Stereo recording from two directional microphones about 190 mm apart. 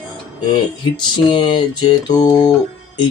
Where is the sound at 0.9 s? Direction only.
25° left (ahead or behind).